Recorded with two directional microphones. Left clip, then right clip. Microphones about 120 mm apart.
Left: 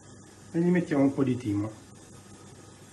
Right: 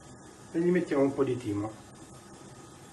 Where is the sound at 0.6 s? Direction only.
40° left (ahead or behind).